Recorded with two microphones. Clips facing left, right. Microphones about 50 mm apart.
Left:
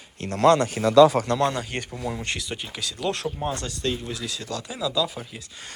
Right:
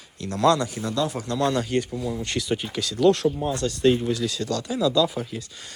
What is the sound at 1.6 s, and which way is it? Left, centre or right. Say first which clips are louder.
Speech: right 7 dB; left.